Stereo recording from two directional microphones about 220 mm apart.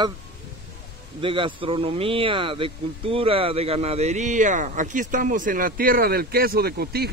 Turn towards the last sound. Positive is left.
turn(degrees=-45)  # may be behind; listen again after turning